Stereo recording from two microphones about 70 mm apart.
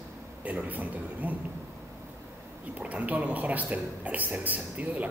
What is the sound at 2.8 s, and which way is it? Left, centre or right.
Speech, right.